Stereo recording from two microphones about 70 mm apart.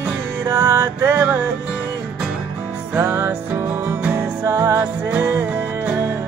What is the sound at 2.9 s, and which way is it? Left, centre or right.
Music, right.